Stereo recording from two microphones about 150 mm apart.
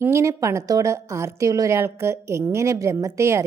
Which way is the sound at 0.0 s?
20° right (ahead or behind).